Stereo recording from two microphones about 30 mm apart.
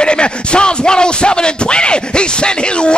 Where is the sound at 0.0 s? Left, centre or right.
Left.